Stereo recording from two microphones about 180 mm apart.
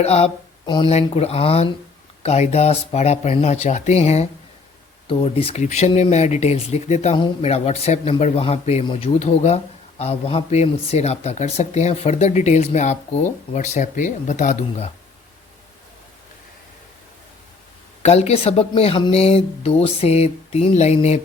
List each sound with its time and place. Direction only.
0.0 s speech: 35° left (ahead or behind)
18.0 s speech: 35° left (ahead or behind)